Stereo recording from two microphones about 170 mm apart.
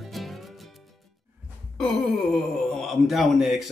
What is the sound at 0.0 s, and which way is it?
Music, centre (ahead or behind).